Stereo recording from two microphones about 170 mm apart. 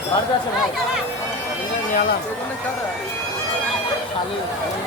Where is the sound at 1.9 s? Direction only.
55° left (ahead or behind).